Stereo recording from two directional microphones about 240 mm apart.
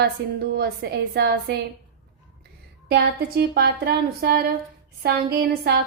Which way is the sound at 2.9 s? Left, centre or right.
Right.